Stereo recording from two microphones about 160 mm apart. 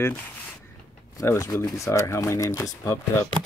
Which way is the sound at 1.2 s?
20° left (ahead or behind).